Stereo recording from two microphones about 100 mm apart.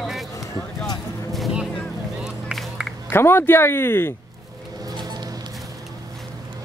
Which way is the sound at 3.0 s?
25° left (ahead or behind).